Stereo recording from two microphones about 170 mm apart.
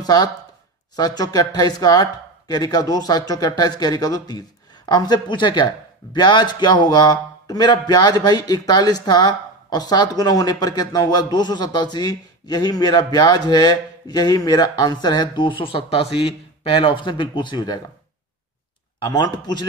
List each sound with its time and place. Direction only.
0.0 s speech: 25° left (ahead or behind)
18.9 s speech: 25° left (ahead or behind)